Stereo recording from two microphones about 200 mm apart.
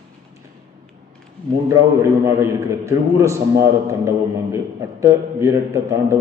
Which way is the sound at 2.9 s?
15° right (ahead or behind).